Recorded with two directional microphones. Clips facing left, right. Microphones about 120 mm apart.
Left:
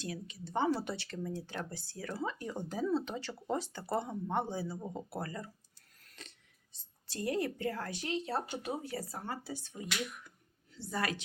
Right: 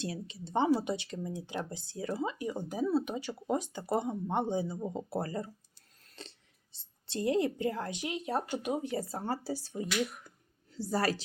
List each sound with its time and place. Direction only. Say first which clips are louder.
0.0 s a woman's voice: right 3 dB; 30° right (ahead or behind)
6.1 s a sound: right 5 dB; 30° right (ahead or behind)
6.7 s a woman's voice: right 5 dB; 25° right (ahead or behind)